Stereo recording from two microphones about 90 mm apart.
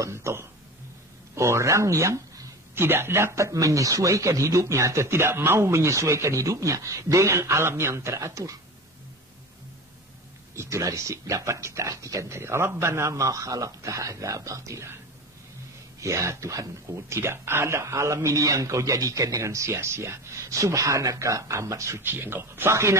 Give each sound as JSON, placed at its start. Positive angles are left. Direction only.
{"t": 0.0, "sound": "a sound", "side_deg": -30}
{"t": 1.3, "sound": "speech", "side_deg": -30}
{"t": 10.5, "sound": "speech", "side_deg": -35}
{"t": 16.0, "sound": "speech", "side_deg": -35}